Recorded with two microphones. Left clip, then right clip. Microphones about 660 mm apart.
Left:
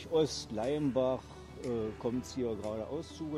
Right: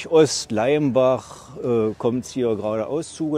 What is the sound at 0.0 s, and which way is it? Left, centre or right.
Speech, right.